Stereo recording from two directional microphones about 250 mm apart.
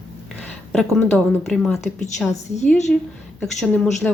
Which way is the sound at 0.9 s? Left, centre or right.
Centre.